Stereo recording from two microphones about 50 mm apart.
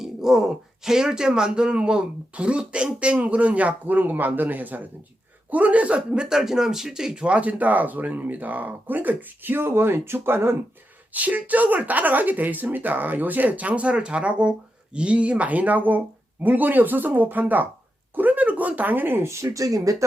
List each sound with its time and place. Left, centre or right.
0.0 s speech: centre
7.3 s speech: right
11.1 s speech: right
18.1 s a sound: right